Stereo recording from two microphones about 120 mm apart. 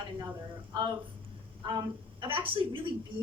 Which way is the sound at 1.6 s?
35° right (ahead or behind).